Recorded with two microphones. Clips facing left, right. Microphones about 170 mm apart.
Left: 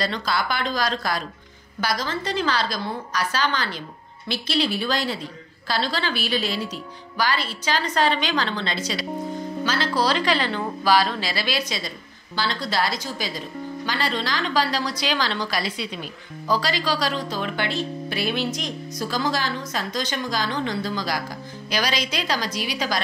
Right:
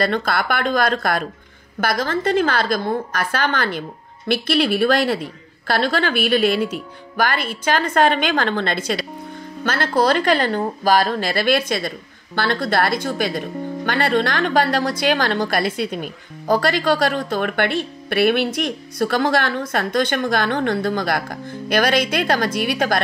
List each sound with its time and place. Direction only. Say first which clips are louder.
0.0 s a woman's voice: right 5 dB; 55° right (ahead or behind)